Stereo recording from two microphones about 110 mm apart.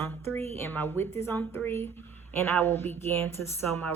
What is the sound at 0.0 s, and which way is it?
A woman's voice, 20° left (ahead or behind).